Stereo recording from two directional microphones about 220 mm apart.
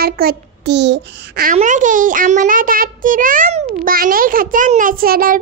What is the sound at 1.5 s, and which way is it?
A child's voice, 35° right (ahead or behind).